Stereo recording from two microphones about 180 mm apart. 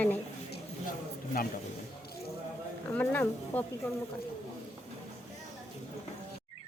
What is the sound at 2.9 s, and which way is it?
Speech, 10° left (ahead or behind).